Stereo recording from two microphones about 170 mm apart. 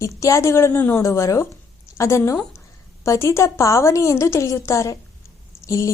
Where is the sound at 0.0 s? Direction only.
20° left (ahead or behind).